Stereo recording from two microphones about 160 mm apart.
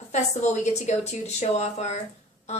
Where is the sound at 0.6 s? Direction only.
45° left (ahead or behind).